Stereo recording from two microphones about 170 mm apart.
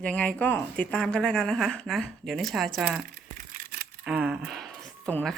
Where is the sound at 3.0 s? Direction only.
60° right (ahead or behind).